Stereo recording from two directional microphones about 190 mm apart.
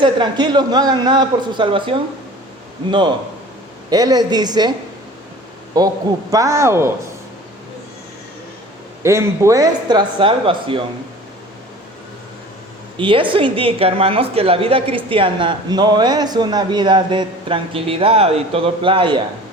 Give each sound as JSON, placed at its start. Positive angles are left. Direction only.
{"t": 0.0, "sound": "a woman's voice", "side_deg": -25}
{"t": 3.8, "sound": "a woman's voice", "side_deg": -20}
{"t": 5.7, "sound": "a woman's voice", "side_deg": -20}
{"t": 9.0, "sound": "a woman's voice", "side_deg": -15}
{"t": 13.0, "sound": "a woman's voice", "side_deg": -25}